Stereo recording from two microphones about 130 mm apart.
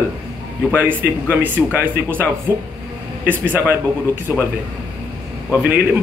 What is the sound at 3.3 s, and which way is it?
Speech, 15° right (ahead or behind).